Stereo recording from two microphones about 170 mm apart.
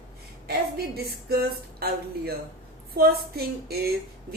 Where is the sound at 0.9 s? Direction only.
65° right (ahead or behind).